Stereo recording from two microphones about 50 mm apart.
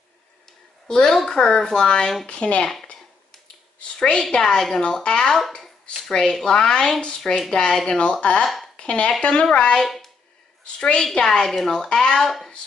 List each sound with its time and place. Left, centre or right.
0.8 s a woman's voice: centre
4.0 s speech: centre
9.8 s a sound: centre
10.6 s a woman's voice: left; by 12.5 s centre